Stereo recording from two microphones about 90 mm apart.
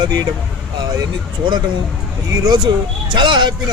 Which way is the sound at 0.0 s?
50° right (ahead or behind).